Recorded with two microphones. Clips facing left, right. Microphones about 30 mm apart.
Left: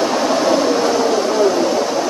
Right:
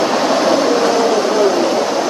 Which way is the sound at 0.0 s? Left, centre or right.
Right.